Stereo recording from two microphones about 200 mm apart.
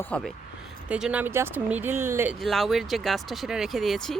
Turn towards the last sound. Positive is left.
turn(degrees=0)  # may be behind; listen again after turning